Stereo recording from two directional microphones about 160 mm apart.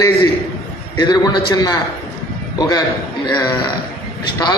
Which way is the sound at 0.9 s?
25° left (ahead or behind).